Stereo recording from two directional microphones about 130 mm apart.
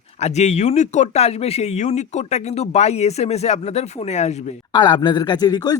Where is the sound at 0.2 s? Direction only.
60° left (ahead or behind).